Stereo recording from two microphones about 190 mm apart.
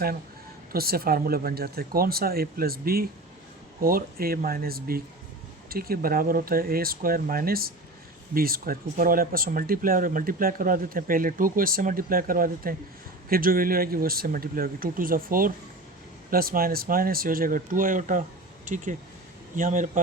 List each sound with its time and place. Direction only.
0.7 s speech: 55° right (ahead or behind)